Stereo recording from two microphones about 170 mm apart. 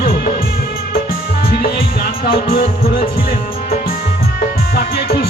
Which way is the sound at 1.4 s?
60° left (ahead or behind).